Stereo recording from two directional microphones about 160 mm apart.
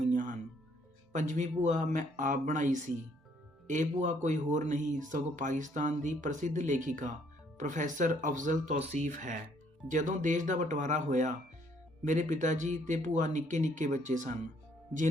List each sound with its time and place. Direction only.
0.1 s music: 50° right (ahead or behind)
1.1 s speech: 50° right (ahead or behind)